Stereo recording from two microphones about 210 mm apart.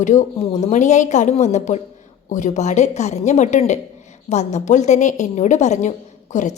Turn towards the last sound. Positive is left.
turn(degrees=35)  # may be behind; listen again after turning